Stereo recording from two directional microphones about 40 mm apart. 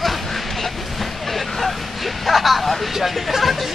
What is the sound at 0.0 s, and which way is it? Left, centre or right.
Vehicle, centre.